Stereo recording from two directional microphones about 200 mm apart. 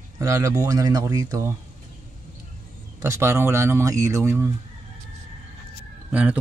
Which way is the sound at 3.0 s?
15° right (ahead or behind).